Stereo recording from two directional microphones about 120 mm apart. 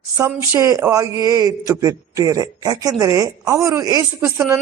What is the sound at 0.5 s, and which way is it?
A man's voice, 25° right (ahead or behind).